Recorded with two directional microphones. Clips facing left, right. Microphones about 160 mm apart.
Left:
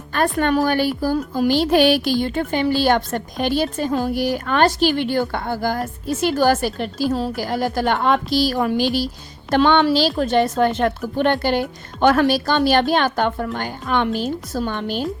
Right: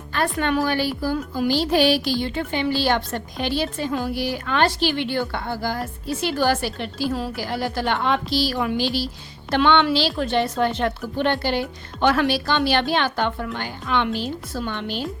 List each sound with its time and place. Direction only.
0.1 s a woman's voice: 50° left (ahead or behind)